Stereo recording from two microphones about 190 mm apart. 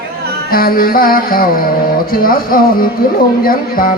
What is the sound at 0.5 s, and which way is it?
Music, 50° left (ahead or behind).